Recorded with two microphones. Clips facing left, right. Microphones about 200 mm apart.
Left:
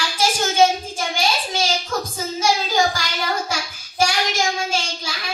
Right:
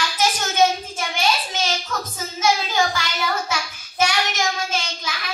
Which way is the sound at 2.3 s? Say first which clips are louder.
Left 1 dB; 35° left (ahead or behind).